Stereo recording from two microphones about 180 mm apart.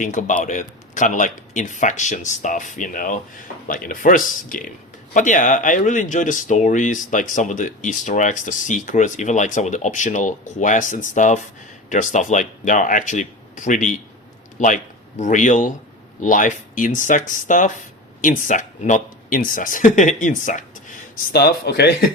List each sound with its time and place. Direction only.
0.0 s a man's voice: 45° left (ahead or behind)
21.3 s speech: 60° left (ahead or behind)